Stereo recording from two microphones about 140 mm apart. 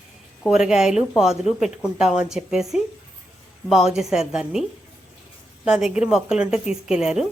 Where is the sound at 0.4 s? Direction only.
5° right (ahead or behind).